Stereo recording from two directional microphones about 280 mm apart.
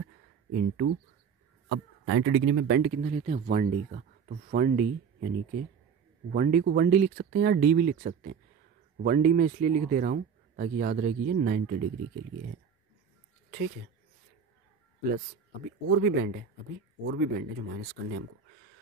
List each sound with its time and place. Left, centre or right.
0.5 s speech: right
1.7 s speech: right
6.3 s speech: right
15.0 s speech: right